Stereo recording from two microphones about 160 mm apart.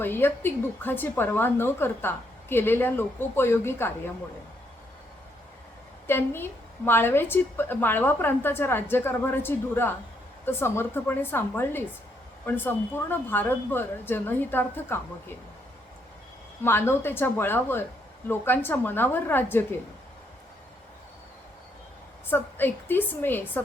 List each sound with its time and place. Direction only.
0.0 s a woman's voice: 15° left (ahead or behind)
6.1 s a woman's voice: 15° left (ahead or behind)
16.6 s a woman's voice: 15° left (ahead or behind)
22.3 s a woman's voice: 10° left (ahead or behind)